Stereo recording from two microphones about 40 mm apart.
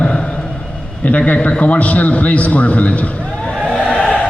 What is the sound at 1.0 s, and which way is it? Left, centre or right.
A man's voice, left.